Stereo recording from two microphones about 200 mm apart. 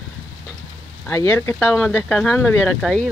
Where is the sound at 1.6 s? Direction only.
5° right (ahead or behind).